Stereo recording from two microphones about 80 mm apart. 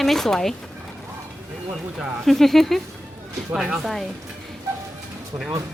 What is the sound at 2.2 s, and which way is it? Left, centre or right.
Speech, centre.